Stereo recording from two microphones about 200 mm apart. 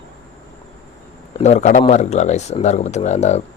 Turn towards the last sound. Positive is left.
turn(degrees=35)  # may be behind; listen again after turning